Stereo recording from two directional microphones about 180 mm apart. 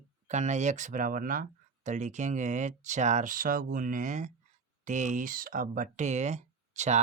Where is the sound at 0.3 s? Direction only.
40° right (ahead or behind).